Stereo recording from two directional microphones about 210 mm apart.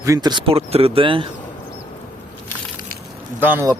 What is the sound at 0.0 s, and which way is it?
Speech, 15° right (ahead or behind).